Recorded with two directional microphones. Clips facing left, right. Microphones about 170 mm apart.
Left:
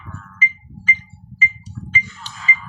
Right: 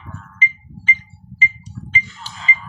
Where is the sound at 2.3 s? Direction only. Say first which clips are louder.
Even; 25° right (ahead or behind).